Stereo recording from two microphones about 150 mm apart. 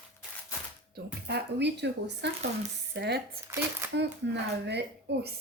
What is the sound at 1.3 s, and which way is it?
Speech, 90° right.